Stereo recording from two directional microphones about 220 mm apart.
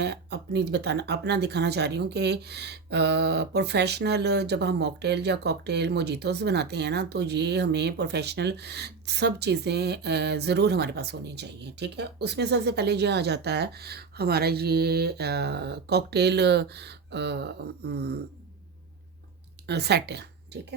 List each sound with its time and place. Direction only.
0.0 s speech: 50° right (ahead or behind)
19.6 s speech: 50° right (ahead or behind)